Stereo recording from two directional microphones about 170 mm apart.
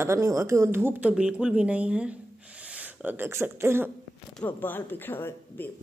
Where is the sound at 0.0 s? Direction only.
15° right (ahead or behind).